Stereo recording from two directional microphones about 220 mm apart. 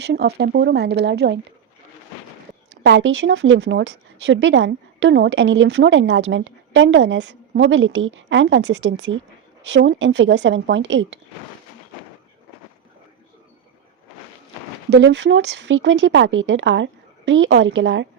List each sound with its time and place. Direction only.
0.0 s speech: 45° right (ahead or behind)
2.8 s speech: 60° right (ahead or behind)
14.8 s speech: 55° right (ahead or behind)